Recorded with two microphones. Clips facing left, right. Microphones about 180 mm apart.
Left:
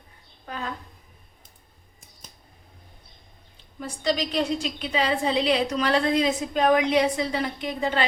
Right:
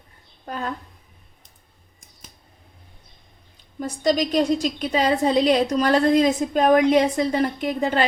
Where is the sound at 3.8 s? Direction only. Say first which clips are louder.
Right 5 dB; 45° right (ahead or behind).